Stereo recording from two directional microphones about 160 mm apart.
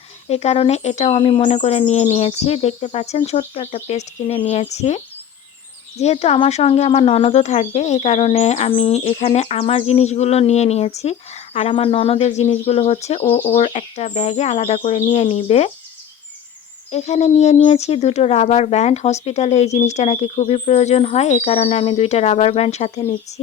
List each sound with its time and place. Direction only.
0.3 s speech: 40° left (ahead or behind)
16.9 s speech: 45° left (ahead or behind)